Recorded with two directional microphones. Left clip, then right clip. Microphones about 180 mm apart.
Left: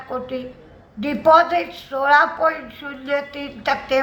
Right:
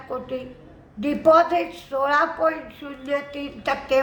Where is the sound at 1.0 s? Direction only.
15° right (ahead or behind).